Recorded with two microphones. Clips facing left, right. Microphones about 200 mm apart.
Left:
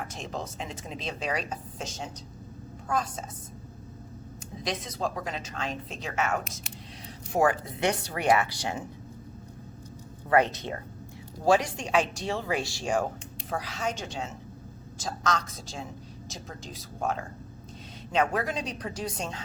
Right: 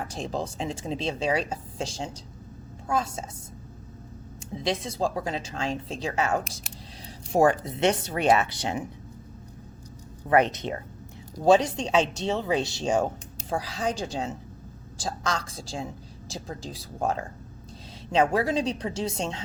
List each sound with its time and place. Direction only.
0.0 s a woman's voice: 30° right (ahead or behind)
4.6 s a woman's voice: 30° right (ahead or behind)
10.2 s a woman's voice: 20° right (ahead or behind)
13.5 s a woman's voice: 35° right (ahead or behind)